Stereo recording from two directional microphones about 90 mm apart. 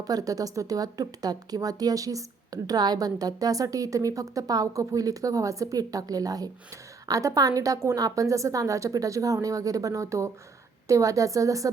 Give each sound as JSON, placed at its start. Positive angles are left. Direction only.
{"t": 0.0, "sound": "speech", "side_deg": -45}